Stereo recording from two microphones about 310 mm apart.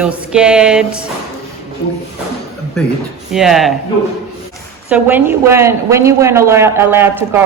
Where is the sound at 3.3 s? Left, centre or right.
Centre.